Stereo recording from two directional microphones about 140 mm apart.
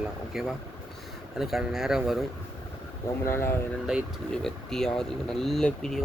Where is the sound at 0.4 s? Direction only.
Centre (ahead or behind).